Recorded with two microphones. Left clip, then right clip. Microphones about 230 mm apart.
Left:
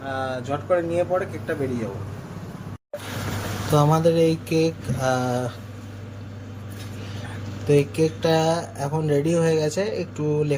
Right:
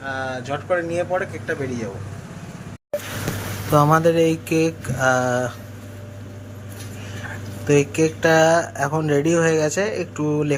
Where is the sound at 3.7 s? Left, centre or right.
Centre.